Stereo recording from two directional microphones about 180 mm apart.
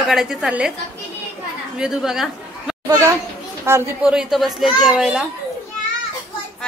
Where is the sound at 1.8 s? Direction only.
5° right (ahead or behind).